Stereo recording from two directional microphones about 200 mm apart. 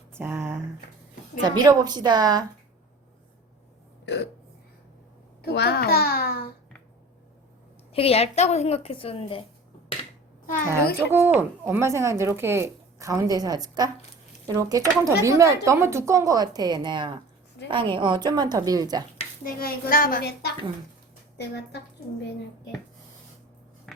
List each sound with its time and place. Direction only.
0.1 s a woman's voice: 10° right (ahead or behind)
4.0 s speech: 60° left (ahead or behind)
5.4 s a woman's voice: 55° left (ahead or behind)
7.9 s a woman's voice: 30° left (ahead or behind)
11.1 s a woman's voice: 10° right (ahead or behind)
19.5 s a woman's voice: 45° left (ahead or behind)